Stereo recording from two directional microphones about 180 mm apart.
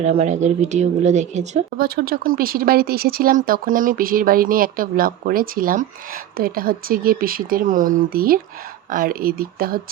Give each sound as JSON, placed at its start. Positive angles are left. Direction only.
{"t": 0.0, "sound": "a woman's voice", "side_deg": -35}
{"t": 2.0, "sound": "speech", "side_deg": -55}